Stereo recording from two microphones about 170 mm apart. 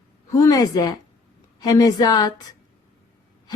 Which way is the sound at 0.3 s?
20° left (ahead or behind).